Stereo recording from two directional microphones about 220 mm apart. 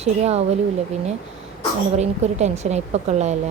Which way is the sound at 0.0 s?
30° right (ahead or behind).